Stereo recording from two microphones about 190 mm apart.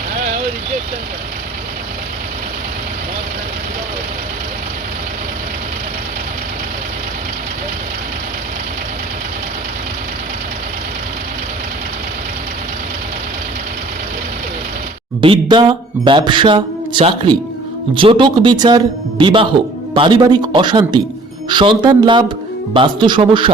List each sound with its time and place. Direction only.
15.2 s speech: 25° right (ahead or behind)